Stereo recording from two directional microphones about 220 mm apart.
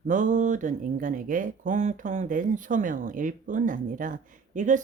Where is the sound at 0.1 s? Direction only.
35° right (ahead or behind).